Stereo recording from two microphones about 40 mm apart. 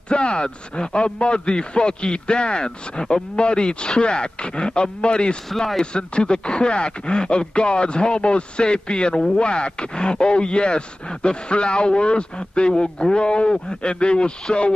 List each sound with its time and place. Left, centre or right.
0.1 s speech: left